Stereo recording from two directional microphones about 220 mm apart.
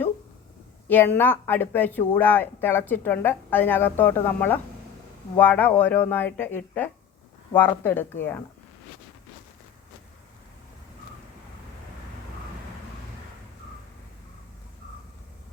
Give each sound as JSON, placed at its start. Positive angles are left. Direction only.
{"t": 0.9, "sound": "speech", "side_deg": 10}